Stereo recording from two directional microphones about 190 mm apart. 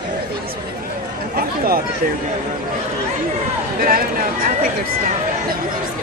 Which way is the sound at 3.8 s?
50° right (ahead or behind).